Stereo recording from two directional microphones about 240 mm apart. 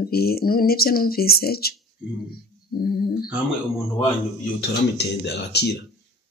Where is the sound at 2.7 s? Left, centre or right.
Left.